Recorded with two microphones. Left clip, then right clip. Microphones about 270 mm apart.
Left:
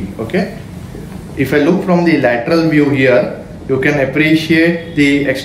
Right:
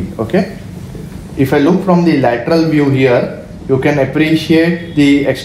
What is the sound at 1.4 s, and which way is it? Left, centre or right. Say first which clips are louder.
A man's voice: right 1 dB; centre.